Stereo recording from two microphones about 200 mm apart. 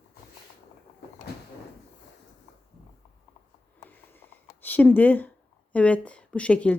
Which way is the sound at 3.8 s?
10° left (ahead or behind).